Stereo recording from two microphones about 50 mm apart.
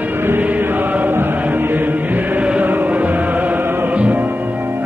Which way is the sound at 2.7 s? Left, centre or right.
Right.